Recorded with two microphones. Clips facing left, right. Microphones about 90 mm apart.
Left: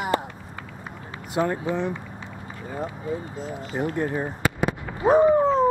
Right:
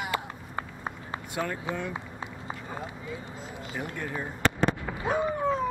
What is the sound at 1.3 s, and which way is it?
Speech, 30° left (ahead or behind).